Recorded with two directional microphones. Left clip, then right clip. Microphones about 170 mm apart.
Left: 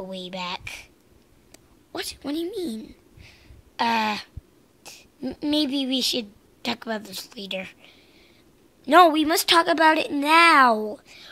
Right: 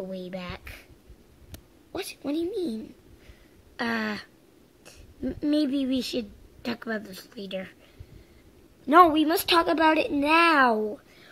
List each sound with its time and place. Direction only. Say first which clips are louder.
0.1 s speech: left 5 dB; 20° left (ahead or behind)
1.9 s a woman's voice: left 1 dB; 15° left (ahead or behind)
3.7 s speech: left 7 dB; 20° left (ahead or behind)
8.8 s speech: left 2 dB; 20° left (ahead or behind)